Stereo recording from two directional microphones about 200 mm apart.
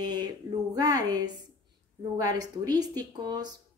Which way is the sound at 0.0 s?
20° right (ahead or behind).